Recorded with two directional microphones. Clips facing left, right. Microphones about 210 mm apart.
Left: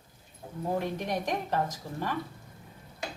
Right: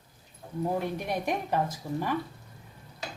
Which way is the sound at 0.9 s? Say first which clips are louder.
Right 1 dB; 10° right (ahead or behind).